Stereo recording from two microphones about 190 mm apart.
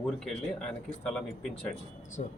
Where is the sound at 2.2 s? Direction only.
50° left (ahead or behind).